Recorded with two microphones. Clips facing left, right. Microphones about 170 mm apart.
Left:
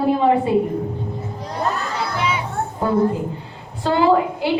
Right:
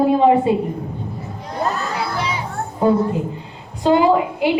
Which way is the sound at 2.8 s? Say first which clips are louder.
Right 2 dB; 20° right (ahead or behind).